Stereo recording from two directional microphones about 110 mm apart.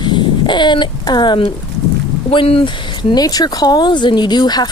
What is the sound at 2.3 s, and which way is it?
Speech, 55° left (ahead or behind).